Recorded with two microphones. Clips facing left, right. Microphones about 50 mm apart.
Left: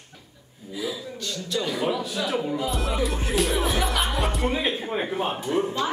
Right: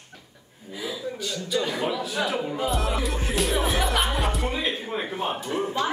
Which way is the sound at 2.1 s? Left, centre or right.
Centre.